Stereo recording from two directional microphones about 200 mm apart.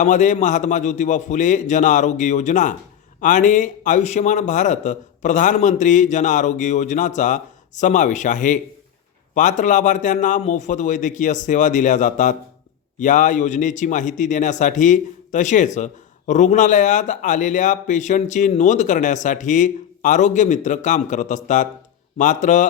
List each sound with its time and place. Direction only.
0.0 s speech: 40° left (ahead or behind)